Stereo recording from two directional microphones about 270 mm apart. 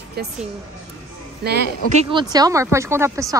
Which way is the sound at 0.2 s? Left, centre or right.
Right.